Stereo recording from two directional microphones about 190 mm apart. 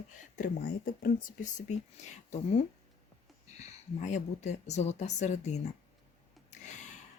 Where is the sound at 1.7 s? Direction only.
35° left (ahead or behind).